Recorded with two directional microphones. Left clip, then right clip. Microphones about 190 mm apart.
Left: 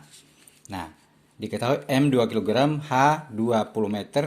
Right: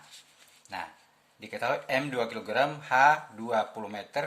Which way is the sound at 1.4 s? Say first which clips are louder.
Left 5 dB; 30° left (ahead or behind).